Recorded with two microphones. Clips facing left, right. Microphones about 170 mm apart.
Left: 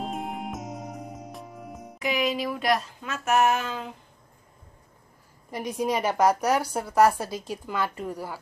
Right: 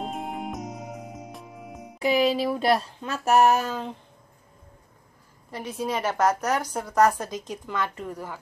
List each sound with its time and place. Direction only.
0.0 s music: centre (ahead or behind)
2.0 s speech: 30° right (ahead or behind)
5.5 s a woman's voice: 15° left (ahead or behind)